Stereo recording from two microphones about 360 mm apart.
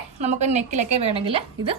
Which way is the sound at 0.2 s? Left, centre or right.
Centre.